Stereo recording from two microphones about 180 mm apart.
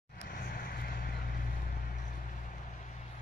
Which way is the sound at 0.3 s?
55° left (ahead or behind).